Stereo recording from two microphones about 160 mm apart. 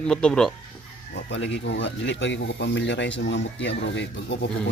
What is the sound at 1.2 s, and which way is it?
Speech, 90° left.